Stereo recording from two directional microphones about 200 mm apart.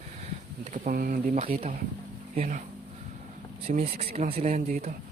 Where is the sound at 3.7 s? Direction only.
30° right (ahead or behind).